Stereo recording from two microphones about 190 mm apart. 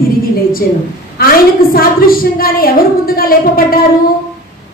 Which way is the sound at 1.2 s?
50° left (ahead or behind).